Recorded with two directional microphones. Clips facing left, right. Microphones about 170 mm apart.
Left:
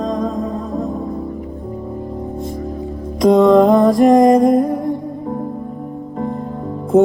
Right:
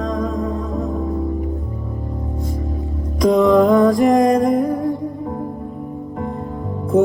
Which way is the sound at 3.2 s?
20° left (ahead or behind).